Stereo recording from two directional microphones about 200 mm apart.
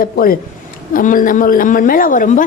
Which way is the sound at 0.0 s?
45° left (ahead or behind).